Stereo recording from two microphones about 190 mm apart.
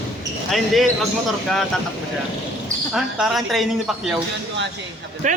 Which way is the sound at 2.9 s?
Centre (ahead or behind).